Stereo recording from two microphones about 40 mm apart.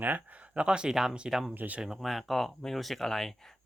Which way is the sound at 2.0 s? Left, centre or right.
Centre.